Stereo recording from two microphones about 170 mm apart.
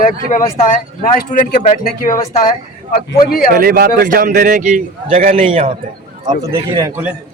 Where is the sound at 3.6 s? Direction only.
60° right (ahead or behind).